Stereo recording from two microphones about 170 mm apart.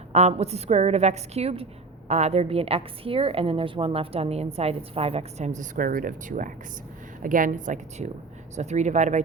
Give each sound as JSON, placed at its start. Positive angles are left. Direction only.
{"t": 0.1, "sound": "a woman's voice", "side_deg": -40}